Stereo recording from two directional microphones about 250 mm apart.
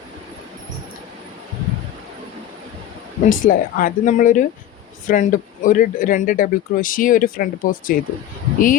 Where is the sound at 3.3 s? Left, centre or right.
Left.